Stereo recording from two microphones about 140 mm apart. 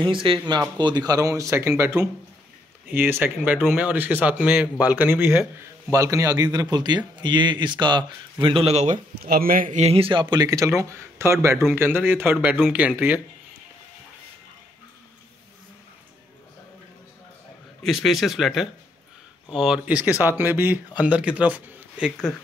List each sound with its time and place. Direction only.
0.0 s a man's voice: 40° right (ahead or behind); by 9.8 s 85° right
9.8 s a man's voice: 45° right (ahead or behind); by 13.2 s 15° right (ahead or behind)
17.8 s speech: centre (ahead or behind)